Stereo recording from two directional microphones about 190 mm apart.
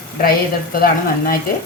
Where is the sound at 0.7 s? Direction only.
50° left (ahead or behind).